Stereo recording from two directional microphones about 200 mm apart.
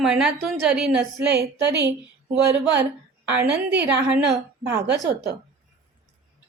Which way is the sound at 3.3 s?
10° right (ahead or behind).